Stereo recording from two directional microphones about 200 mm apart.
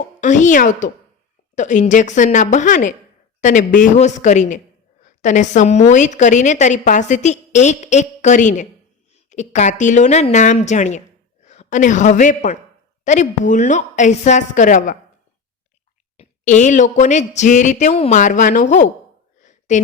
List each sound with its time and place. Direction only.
0.2 s a woman's voice: 40° left (ahead or behind)
16.1 s a woman's voice: 35° left (ahead or behind)
19.4 s a sound: 35° left (ahead or behind)